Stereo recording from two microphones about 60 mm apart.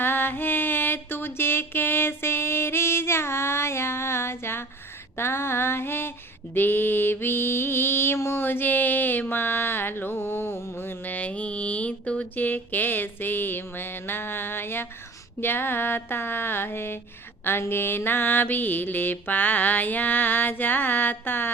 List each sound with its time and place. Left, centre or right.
0.0 s mantra: left
5.1 s female singing: left
6.5 s mantra: left